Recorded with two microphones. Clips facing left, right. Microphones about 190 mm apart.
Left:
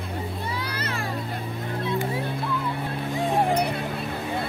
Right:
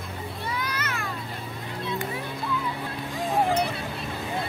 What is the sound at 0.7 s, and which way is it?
Children playing, 30° left (ahead or behind).